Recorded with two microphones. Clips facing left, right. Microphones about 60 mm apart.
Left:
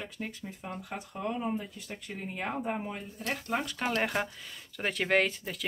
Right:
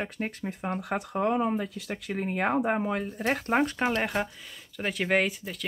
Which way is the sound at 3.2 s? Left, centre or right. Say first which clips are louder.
Right 7 dB; right.